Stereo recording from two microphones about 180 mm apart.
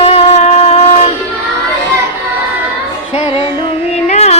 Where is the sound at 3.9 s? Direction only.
35° left (ahead or behind).